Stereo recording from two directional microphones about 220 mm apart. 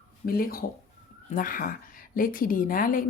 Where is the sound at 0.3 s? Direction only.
40° left (ahead or behind).